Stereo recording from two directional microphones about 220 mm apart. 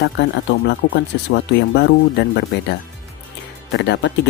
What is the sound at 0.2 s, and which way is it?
Speech, 55° left (ahead or behind).